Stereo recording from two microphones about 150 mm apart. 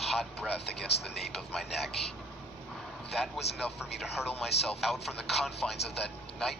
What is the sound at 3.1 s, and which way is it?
Speech, centre (ahead or behind).